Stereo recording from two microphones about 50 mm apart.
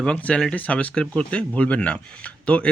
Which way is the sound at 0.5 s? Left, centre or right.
Left.